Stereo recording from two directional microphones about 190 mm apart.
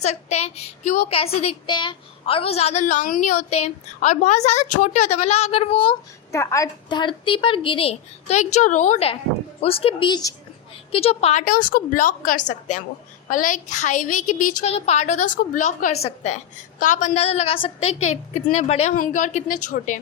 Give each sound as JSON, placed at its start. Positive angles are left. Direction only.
{"t": 0.0, "sound": "a woman's voice", "side_deg": 35}
{"t": 6.3, "sound": "a woman's voice", "side_deg": 15}
{"t": 10.9, "sound": "a woman's voice", "side_deg": 30}
{"t": 18.9, "sound": "a woman's voice", "side_deg": 45}